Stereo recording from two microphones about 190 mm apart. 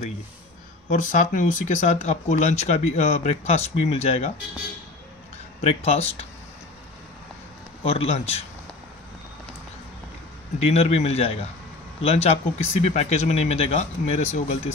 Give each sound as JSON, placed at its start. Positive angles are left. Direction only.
{"t": 0.8, "sound": "speech", "side_deg": 40}
{"t": 5.6, "sound": "speech", "side_deg": 35}
{"t": 7.8, "sound": "speech", "side_deg": 30}
{"t": 10.6, "sound": "speech", "side_deg": 35}